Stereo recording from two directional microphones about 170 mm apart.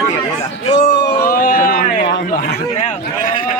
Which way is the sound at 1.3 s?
55° left (ahead or behind).